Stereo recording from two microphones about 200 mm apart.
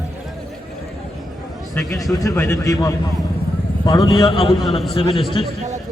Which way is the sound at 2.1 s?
15° left (ahead or behind).